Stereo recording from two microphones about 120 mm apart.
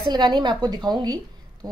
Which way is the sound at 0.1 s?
35° right (ahead or behind).